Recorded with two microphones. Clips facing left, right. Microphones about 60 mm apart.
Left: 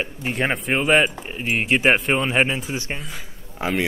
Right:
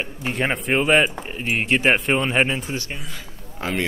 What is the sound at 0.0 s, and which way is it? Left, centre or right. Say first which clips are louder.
Speech: even; centre.